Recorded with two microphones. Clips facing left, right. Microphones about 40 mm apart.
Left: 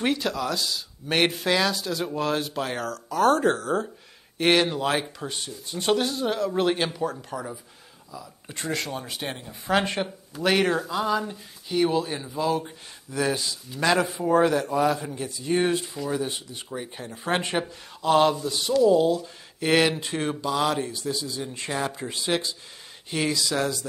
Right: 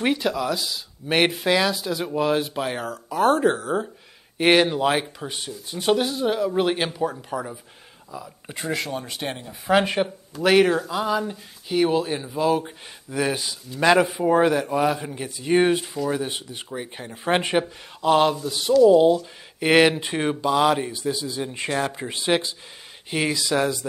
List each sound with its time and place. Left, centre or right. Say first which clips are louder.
0.0 s speech: right 3 dB; centre
8.1 s speech: right 4 dB; right
8.5 s a man's voice: right 2 dB; centre
18.0 s speech: right 1 dB; centre
18.9 s a man's voice: right 5 dB; right